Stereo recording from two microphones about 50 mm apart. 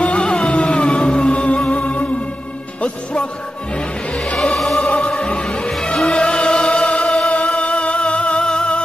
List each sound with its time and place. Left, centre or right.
0.0 s music: left; by 4.8 s centre
4.8 s music: left
5.7 s music: centre
7.2 s music: left